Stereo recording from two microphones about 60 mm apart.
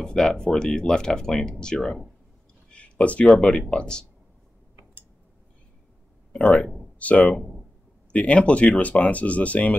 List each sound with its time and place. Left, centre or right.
0.0 s speech: centre
2.7 s a sound: left
3.3 s speech: centre
6.3 s speech: left